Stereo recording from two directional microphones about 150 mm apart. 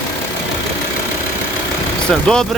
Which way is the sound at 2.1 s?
5° left (ahead or behind).